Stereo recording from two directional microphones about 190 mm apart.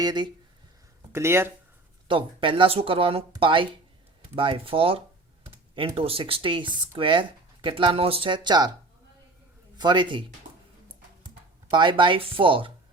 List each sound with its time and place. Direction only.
0.0 s speech: 20° right (ahead or behind)
2.0 s speech: 25° right (ahead or behind)
9.7 s speech: 25° right (ahead or behind)
11.7 s speech: 25° right (ahead or behind)